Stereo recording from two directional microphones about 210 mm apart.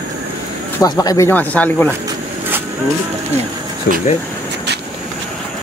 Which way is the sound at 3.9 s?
50° left (ahead or behind).